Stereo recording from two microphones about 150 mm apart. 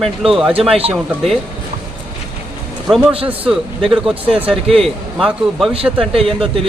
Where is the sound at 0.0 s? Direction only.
Centre (ahead or behind).